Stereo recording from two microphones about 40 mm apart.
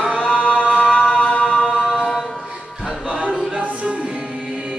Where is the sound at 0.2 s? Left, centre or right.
Left.